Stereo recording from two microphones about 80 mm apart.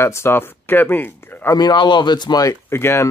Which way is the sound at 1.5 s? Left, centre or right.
Left.